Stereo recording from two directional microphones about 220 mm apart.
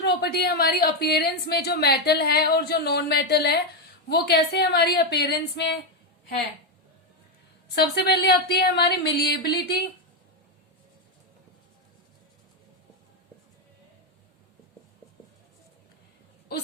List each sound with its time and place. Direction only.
0.0 s a woman's voice: 50° left (ahead or behind)
7.8 s a woman's voice: 45° left (ahead or behind)